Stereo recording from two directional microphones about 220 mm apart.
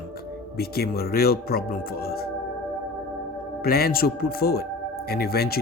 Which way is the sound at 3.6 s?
45° left (ahead or behind).